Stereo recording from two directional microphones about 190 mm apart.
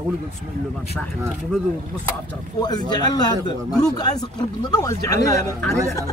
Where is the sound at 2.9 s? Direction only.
20° left (ahead or behind).